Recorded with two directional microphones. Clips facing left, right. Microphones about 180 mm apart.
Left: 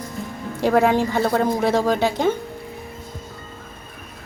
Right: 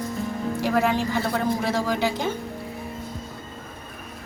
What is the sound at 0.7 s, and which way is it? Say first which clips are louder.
A woman's voice: left 6 dB; 60° left (ahead or behind).